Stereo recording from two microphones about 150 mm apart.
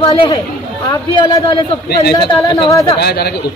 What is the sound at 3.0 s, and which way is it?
Speech, 90° left.